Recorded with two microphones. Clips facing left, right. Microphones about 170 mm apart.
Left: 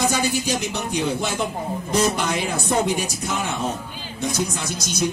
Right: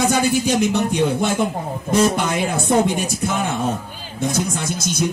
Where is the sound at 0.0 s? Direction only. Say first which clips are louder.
Right 4 dB; 55° right (ahead or behind).